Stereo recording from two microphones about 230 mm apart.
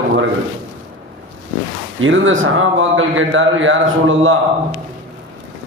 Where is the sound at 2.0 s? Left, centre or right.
Right.